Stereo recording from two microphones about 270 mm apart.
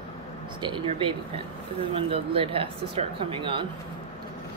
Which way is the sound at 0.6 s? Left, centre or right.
Centre.